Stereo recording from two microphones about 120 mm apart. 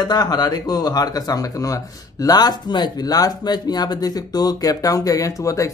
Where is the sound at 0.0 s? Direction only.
35° left (ahead or behind).